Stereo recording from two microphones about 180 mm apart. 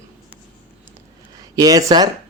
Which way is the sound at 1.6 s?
20° right (ahead or behind).